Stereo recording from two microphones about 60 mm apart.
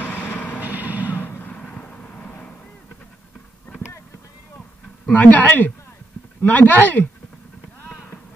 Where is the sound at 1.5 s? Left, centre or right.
Left.